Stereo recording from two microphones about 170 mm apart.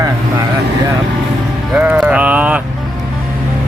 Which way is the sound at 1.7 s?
5° right (ahead or behind).